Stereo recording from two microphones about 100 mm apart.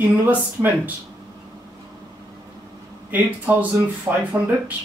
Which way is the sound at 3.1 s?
15° right (ahead or behind).